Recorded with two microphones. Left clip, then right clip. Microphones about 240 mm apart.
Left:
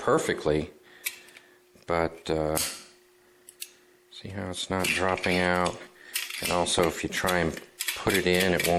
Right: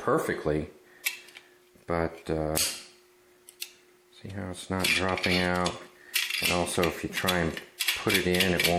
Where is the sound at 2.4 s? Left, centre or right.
Centre.